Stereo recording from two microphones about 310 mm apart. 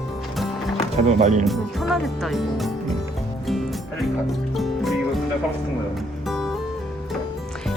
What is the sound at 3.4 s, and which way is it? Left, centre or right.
Music, centre.